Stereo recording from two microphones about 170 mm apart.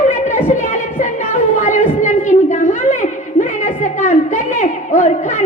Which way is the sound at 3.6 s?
45° left (ahead or behind).